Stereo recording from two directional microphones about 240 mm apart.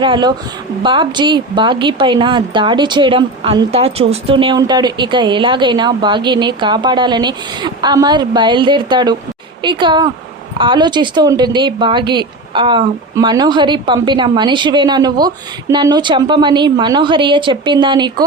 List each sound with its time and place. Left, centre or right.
0.0 s speech: centre